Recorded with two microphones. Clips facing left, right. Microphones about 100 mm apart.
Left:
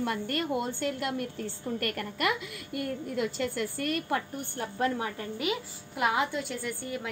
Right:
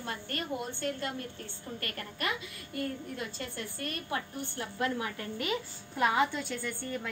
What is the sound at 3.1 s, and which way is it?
Speech, 80° left.